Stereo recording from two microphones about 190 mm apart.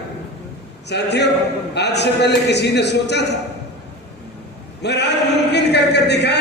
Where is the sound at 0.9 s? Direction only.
65° left (ahead or behind).